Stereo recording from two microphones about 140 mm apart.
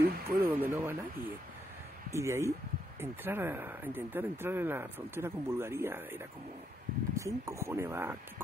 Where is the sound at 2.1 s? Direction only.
20° right (ahead or behind).